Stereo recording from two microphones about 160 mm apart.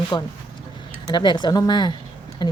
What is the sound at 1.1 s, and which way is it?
A woman's voice, 30° left (ahead or behind).